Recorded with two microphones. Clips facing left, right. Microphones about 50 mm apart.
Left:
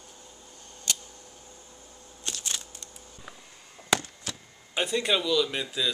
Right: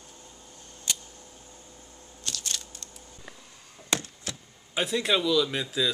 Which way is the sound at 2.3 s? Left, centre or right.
Centre.